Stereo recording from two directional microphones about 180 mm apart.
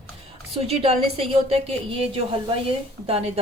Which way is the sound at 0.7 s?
30° right (ahead or behind).